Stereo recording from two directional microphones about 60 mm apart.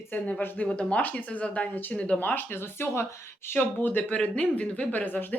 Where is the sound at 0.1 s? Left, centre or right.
Left.